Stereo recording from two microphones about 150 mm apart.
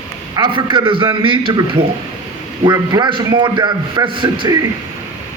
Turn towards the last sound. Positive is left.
turn(degrees=-30)  # may be behind; listen again after turning